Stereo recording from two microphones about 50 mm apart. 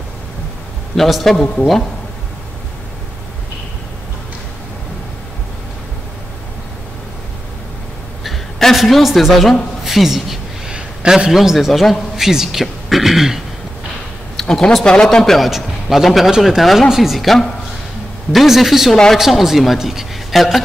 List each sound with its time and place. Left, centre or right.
0.9 s a man's voice: centre
8.2 s a woman's voice: centre
10.7 s a sound: centre
11.3 s a man's voice: centre
14.3 s a man's voice: centre